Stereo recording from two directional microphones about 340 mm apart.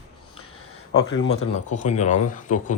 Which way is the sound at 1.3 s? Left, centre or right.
Centre.